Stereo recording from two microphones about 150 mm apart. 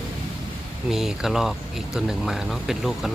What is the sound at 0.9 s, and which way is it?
Speech, 5° right (ahead or behind).